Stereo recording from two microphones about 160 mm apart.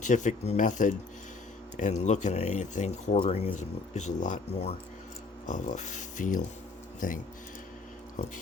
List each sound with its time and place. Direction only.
0.0 s speech: 50° left (ahead or behind)
8.2 s speech: 50° left (ahead or behind)